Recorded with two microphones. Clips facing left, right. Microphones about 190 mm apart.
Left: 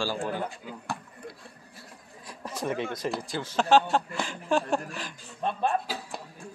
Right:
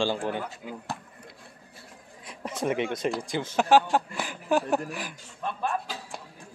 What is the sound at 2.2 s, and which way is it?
Speech, 20° right (ahead or behind).